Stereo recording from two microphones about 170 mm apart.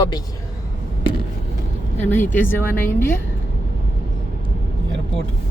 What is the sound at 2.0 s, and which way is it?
Speech, 10° left (ahead or behind).